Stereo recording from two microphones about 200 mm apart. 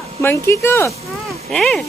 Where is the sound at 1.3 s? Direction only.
Centre (ahead or behind).